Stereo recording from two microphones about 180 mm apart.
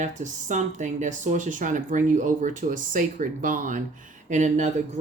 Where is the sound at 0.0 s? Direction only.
45° right (ahead or behind).